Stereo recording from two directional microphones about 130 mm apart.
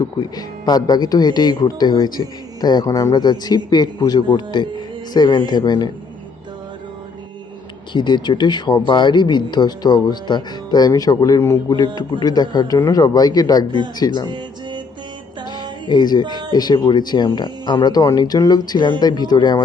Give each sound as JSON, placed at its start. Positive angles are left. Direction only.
{"t": 0.0, "sound": "speech", "side_deg": 30}
{"t": 7.9, "sound": "speech", "side_deg": 35}
{"t": 15.4, "sound": "music", "side_deg": -35}
{"t": 15.9, "sound": "speech", "side_deg": 35}